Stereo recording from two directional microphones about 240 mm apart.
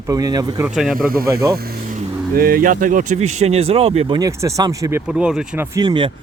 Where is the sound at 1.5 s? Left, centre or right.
Right.